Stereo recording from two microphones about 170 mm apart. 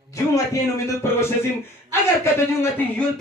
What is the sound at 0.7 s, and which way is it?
A man's voice, 20° left (ahead or behind).